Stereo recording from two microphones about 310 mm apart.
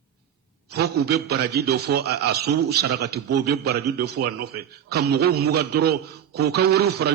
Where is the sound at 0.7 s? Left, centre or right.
Right.